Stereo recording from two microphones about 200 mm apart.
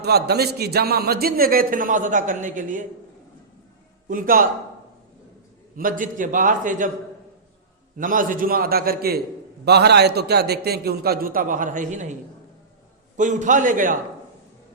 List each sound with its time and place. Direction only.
0.0 s a man's voice: 55° right (ahead or behind)
4.1 s a man's voice: 45° right (ahead or behind)
5.7 s a man's voice: 40° right (ahead or behind)
7.9 s a man's voice: 45° right (ahead or behind)
13.1 s a man's voice: 40° right (ahead or behind)